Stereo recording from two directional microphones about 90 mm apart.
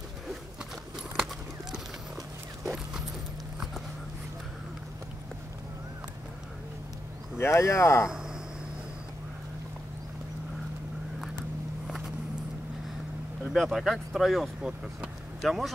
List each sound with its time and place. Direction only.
1.1 s a sound: 5° right (ahead or behind)
7.3 s speech: 30° left (ahead or behind)
13.4 s speech: centre (ahead or behind)